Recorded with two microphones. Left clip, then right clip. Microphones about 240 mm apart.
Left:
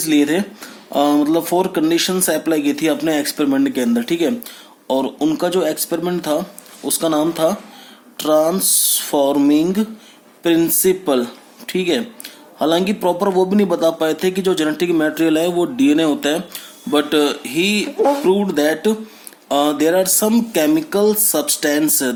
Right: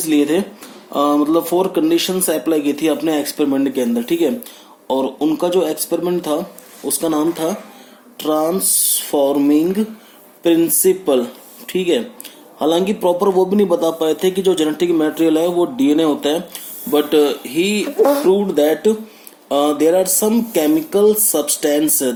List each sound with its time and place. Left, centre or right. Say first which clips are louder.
0.0 s speech: even; left
17.8 s speech: right 2 dB; right
18.3 s speech: right 2 dB; left